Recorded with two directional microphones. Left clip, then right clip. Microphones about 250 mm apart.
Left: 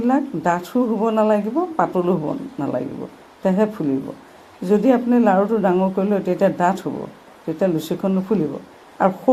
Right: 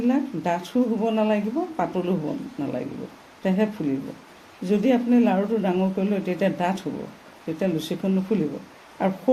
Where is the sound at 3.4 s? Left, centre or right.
Centre.